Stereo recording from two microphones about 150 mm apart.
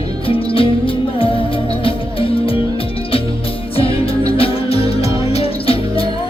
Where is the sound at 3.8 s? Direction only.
40° left (ahead or behind).